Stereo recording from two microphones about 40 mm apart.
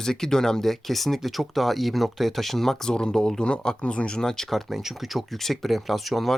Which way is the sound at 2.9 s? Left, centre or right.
Centre.